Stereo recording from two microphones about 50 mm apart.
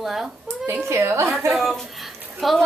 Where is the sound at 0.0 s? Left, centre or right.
Centre.